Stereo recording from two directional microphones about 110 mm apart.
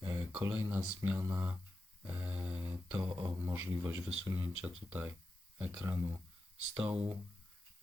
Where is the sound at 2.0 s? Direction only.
15° right (ahead or behind).